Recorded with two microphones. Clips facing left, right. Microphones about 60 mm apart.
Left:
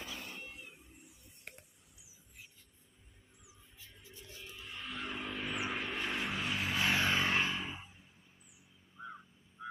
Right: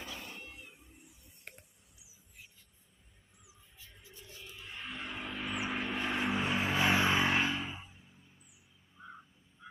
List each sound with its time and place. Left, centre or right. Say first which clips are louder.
0.0 s a sound: even; centre
4.7 s music: even; right
5.1 s vehicle: right 1 dB; centre